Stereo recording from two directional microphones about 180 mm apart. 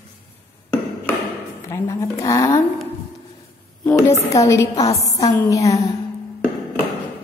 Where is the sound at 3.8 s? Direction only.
15° left (ahead or behind).